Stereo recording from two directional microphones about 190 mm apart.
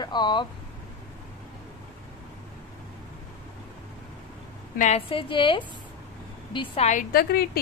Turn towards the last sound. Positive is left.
turn(degrees=55)  # may be behind; listen again after turning